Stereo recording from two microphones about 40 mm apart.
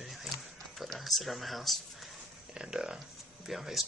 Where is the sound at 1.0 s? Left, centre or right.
Centre.